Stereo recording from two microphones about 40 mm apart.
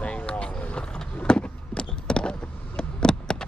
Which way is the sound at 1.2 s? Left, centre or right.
Left.